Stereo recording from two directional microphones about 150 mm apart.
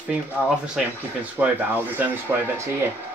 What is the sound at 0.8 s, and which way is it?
Speech, 5° right (ahead or behind).